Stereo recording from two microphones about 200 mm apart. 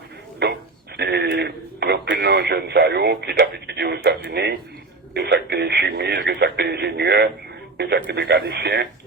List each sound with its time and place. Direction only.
0.4 s speech: 55° right (ahead or behind)